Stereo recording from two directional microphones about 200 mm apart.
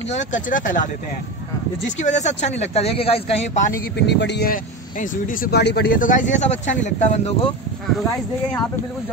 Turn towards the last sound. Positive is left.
turn(degrees=35)  # may be behind; listen again after turning